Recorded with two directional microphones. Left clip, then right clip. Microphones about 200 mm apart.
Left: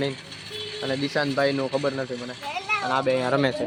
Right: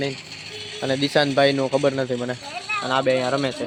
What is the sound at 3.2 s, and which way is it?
Speech, 5° left (ahead or behind).